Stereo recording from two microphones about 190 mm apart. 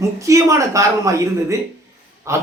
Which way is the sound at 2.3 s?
15° right (ahead or behind).